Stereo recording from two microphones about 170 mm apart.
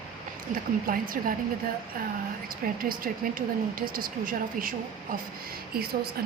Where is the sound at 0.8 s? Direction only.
55° right (ahead or behind).